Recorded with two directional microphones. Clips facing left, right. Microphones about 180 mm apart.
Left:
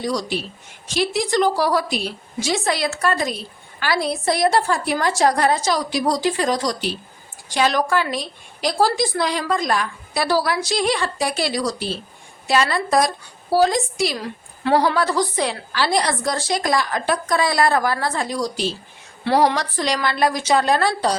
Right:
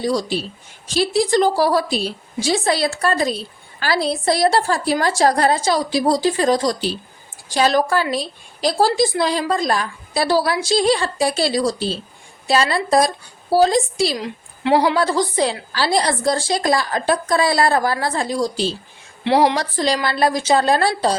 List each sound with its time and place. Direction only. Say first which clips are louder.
0.0 s a woman's voice: right 3 dB; 30° right (ahead or behind)